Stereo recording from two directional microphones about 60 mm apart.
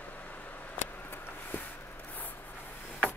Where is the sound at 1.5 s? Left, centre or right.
Left.